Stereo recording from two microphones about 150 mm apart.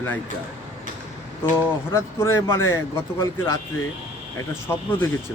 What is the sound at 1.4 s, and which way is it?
A man's voice, 15° left (ahead or behind).